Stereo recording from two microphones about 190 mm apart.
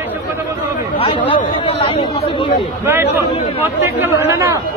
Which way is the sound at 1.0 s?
25° left (ahead or behind).